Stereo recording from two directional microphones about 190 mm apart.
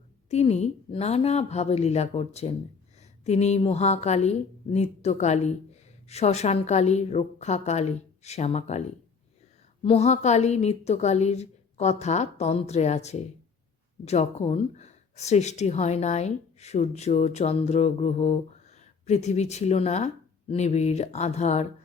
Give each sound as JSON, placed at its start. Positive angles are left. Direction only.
{"t": 0.3, "sound": "speech", "side_deg": 35}
{"t": 9.8, "sound": "speech", "side_deg": 35}